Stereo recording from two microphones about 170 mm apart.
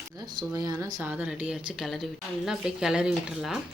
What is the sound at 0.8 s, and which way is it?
Speech, 20° right (ahead or behind).